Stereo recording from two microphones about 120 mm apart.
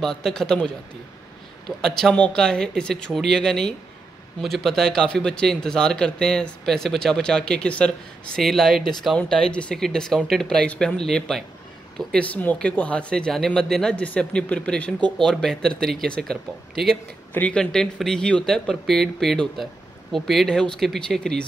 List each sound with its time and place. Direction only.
0.0 s speech: 5° left (ahead or behind)
1.8 s speech: 5° left (ahead or behind)